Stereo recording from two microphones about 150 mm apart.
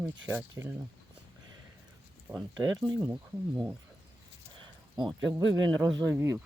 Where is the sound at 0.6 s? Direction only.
15° right (ahead or behind).